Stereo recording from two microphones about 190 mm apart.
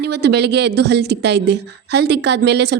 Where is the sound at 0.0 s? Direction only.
60° right (ahead or behind).